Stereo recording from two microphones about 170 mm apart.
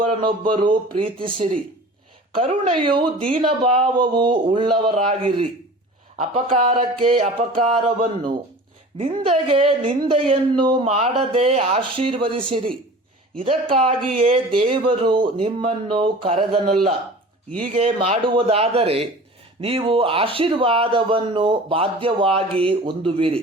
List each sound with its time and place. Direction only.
0.2 s speech: 25° right (ahead or behind)
17.6 s speech: 35° right (ahead or behind)